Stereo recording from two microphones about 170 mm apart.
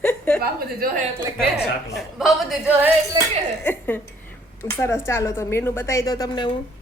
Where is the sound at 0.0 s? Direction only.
5° left (ahead or behind).